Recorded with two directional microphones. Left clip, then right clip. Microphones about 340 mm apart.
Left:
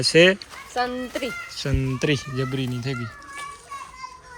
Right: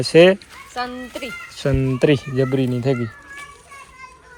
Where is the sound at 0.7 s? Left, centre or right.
Left.